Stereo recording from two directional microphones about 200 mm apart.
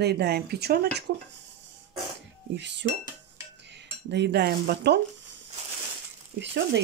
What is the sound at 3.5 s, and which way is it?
Cutlery, 60° right (ahead or behind).